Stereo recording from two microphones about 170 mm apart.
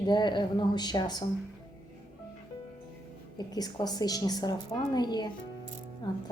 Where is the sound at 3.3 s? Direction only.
25° left (ahead or behind).